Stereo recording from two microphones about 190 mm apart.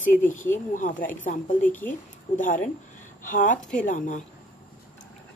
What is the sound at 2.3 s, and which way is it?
Speech, 45° left (ahead or behind).